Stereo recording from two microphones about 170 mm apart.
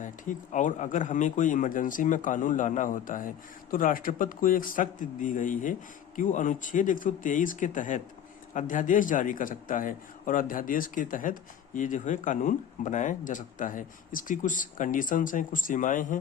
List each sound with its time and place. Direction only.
0.0 s a man's voice: 50° left (ahead or behind)